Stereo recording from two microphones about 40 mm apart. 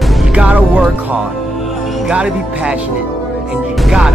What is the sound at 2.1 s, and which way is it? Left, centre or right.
Speech, right.